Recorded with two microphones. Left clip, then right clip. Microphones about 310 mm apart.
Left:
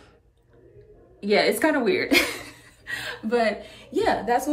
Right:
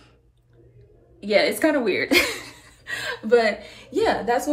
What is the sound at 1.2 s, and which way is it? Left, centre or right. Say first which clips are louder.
A woman's voice: right 1 dB; centre.